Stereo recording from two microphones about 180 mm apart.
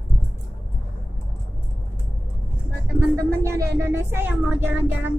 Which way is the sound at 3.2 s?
15° right (ahead or behind).